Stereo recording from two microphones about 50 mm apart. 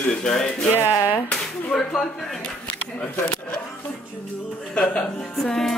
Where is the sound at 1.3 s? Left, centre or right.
Centre.